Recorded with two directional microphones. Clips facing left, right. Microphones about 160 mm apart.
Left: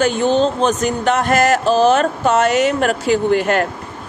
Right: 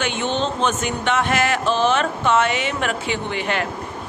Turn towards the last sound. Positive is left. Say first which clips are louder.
# left 9 dB
turn(degrees=45)  # may be behind; listen again after turning